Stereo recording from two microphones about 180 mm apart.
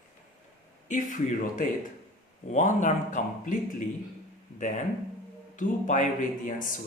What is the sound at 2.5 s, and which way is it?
Speech, 45° left (ahead or behind).